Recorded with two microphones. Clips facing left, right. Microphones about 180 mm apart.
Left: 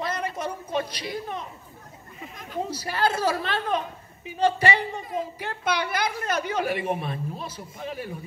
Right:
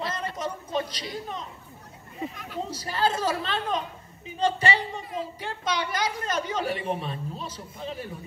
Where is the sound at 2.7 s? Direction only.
10° left (ahead or behind).